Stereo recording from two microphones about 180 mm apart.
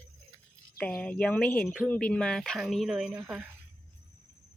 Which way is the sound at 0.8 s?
5° left (ahead or behind).